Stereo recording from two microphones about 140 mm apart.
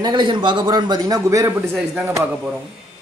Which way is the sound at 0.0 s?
35° right (ahead or behind).